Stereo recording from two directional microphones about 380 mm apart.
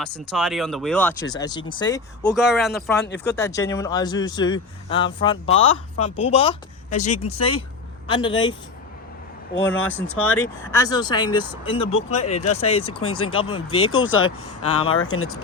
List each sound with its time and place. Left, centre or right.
0.3 s speech: centre
2.3 s speech: centre
5.5 s speech: left
6.1 s speech: centre
9.7 s speech: left
10.3 s speech: centre
12.9 s speech: left
13.3 s speech: centre
13.7 s speech: left